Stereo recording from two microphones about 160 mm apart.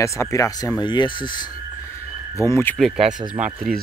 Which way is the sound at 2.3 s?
15° left (ahead or behind).